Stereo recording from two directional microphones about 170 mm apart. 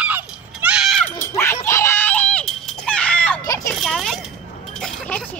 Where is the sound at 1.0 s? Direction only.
15° left (ahead or behind).